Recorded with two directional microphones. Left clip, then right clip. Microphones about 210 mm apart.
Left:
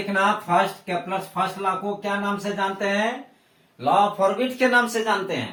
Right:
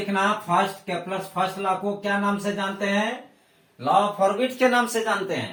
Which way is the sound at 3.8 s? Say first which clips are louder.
Left 1 dB; 10° right (ahead or behind).